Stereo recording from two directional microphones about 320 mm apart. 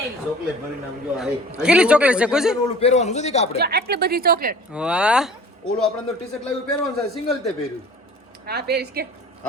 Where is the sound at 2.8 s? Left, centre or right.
Left.